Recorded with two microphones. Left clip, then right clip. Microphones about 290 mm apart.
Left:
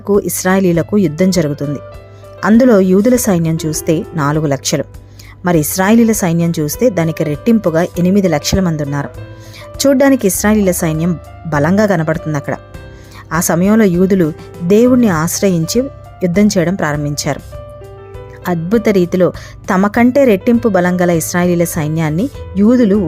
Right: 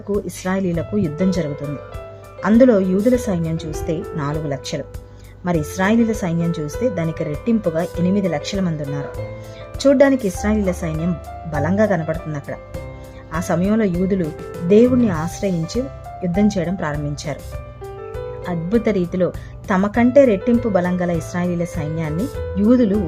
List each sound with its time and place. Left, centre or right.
0.1 s speech: centre
18.4 s speech: centre